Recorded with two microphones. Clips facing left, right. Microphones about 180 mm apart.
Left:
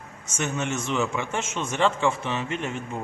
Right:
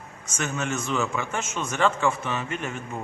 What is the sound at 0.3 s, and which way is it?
A man's voice, 25° left (ahead or behind).